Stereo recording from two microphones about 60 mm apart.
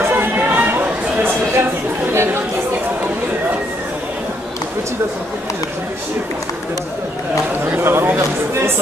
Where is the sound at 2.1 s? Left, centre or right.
Right.